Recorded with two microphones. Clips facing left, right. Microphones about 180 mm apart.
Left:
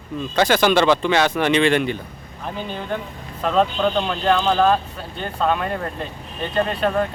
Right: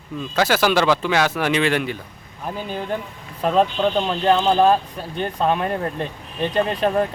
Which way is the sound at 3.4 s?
10° right (ahead or behind).